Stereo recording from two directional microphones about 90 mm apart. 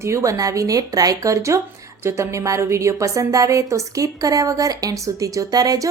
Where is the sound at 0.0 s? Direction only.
35° right (ahead or behind).